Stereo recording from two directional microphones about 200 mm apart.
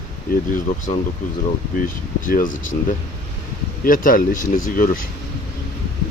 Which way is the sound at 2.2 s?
40° left (ahead or behind).